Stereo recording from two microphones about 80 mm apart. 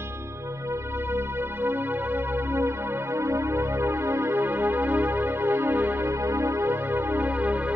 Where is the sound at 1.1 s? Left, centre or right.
Right.